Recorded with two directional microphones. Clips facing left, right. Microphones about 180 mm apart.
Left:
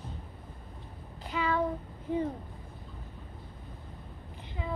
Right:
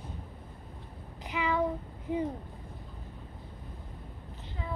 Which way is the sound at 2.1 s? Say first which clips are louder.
Left 1 dB; 10° right (ahead or behind).